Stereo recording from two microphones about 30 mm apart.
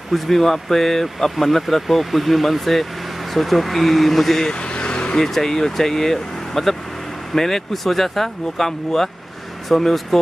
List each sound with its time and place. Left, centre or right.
0.1 s speech: centre
4.5 s vehicle: left
5.1 s speech: centre